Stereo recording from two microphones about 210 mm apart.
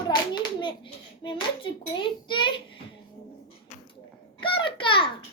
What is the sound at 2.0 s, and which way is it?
Speech, 20° left (ahead or behind).